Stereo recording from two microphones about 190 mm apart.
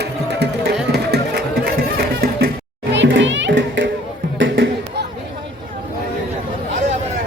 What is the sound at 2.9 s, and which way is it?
Children playing, 70° right (ahead or behind).